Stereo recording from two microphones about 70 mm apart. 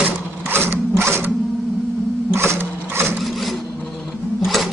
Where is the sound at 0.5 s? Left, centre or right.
Right.